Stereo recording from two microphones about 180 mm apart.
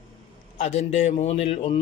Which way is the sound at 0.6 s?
35° left (ahead or behind).